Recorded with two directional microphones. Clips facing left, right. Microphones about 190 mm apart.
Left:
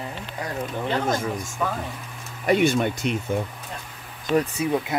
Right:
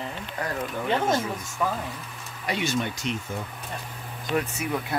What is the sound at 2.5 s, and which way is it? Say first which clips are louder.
Speech: left 8 dB; 55° left (ahead or behind).